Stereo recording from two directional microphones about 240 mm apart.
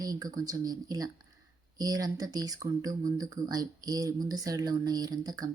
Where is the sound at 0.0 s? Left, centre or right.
Centre.